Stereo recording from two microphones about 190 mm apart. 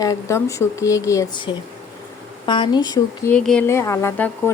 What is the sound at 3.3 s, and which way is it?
Speech, 5° left (ahead or behind).